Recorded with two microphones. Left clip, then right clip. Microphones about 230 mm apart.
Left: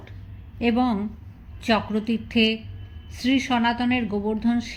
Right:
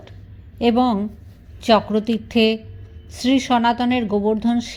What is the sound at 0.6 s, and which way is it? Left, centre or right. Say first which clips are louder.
A woman's voice: right 5 dB; right.